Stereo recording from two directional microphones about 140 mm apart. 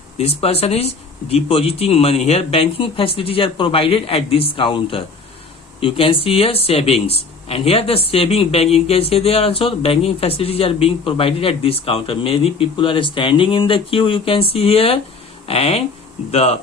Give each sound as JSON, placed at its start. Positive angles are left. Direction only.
{"t": 0.2, "sound": "speech", "side_deg": 45}